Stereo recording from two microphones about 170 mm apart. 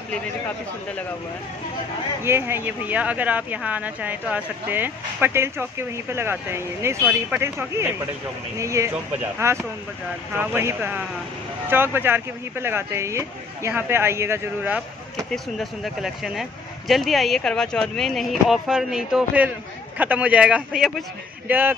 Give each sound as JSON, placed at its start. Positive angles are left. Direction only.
{"t": 2.2, "sound": "speech", "side_deg": -15}
{"t": 8.5, "sound": "speech", "side_deg": -15}
{"t": 15.3, "sound": "speech", "side_deg": 0}